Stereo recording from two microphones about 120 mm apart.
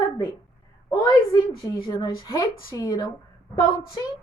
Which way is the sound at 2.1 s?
25° left (ahead or behind).